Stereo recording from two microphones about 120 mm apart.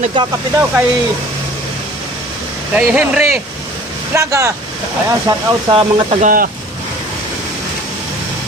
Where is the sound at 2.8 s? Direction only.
10° right (ahead or behind).